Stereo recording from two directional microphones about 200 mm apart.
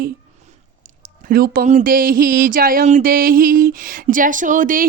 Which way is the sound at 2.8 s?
40° right (ahead or behind).